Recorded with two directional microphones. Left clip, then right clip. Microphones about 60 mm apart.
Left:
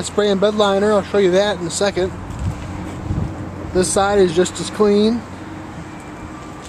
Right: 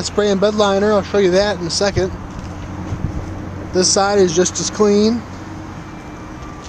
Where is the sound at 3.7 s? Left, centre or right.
Right.